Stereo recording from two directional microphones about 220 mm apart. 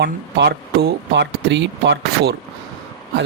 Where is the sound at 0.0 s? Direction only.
50° right (ahead or behind).